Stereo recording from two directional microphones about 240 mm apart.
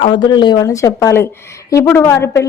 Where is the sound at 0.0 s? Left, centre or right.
Centre.